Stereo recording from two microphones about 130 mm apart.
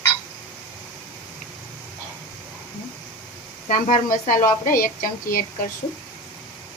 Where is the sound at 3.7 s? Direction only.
85° left.